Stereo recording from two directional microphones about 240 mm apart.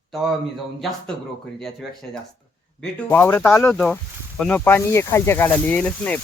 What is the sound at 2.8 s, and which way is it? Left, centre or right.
Speech, centre.